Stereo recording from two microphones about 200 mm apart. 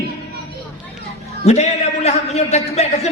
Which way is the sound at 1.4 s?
30° left (ahead or behind).